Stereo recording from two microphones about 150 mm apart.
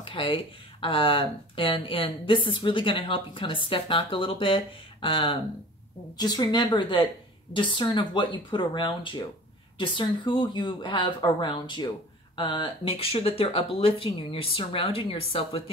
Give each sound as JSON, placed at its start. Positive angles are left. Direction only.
{"t": 0.1, "sound": "a woman's voice", "side_deg": 35}